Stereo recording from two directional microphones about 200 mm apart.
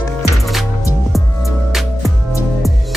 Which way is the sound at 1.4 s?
Centre (ahead or behind).